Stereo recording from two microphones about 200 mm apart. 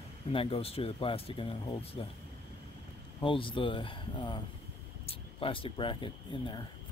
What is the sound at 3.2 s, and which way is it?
Speech, 25° left (ahead or behind).